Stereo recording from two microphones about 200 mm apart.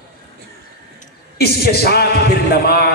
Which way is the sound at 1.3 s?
50° left (ahead or behind).